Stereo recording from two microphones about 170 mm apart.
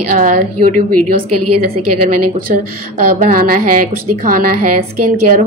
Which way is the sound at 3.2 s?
55° right (ahead or behind).